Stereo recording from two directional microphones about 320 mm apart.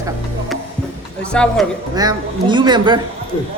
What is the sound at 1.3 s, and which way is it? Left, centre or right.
Speech, centre.